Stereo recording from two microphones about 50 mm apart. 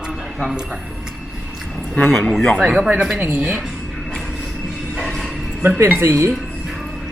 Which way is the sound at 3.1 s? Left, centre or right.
Right.